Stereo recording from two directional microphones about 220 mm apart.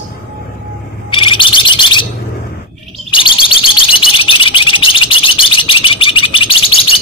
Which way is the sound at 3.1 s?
20° left (ahead or behind).